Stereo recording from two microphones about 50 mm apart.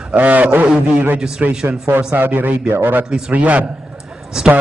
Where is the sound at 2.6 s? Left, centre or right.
Right.